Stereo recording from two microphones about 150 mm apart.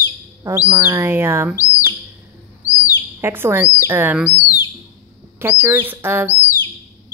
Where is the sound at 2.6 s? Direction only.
10° right (ahead or behind).